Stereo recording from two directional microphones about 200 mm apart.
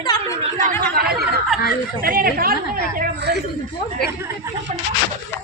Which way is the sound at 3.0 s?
55° right (ahead or behind).